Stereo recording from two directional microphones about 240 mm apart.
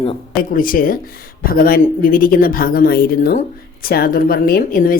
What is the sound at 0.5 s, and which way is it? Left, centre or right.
Speech, left.